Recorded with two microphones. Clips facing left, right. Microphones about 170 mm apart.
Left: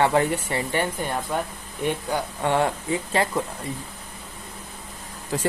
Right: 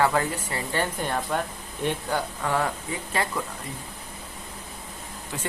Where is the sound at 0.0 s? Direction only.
25° left (ahead or behind).